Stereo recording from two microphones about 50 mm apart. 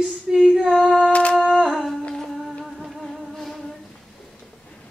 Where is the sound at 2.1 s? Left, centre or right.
Centre.